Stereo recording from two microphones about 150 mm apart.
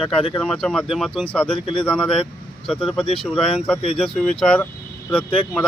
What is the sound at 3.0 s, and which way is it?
Speech, 40° left (ahead or behind).